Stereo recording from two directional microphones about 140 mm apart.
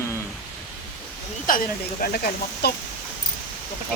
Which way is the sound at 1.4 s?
90° left.